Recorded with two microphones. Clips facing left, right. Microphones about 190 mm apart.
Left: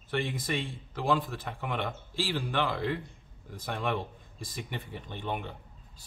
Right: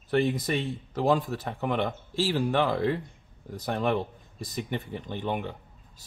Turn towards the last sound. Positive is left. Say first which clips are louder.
# right 5 dB
turn(degrees=-45)  # may be behind; listen again after turning